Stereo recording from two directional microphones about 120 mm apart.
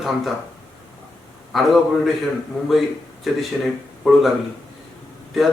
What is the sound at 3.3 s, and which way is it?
Speech, centre (ahead or behind).